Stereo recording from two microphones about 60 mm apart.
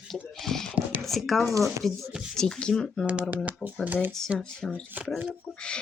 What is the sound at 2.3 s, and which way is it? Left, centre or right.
Speech, centre.